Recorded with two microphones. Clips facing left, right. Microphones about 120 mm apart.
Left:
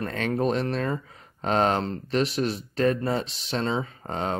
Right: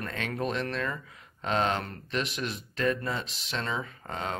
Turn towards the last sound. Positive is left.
turn(degrees=35)  # may be behind; listen again after turning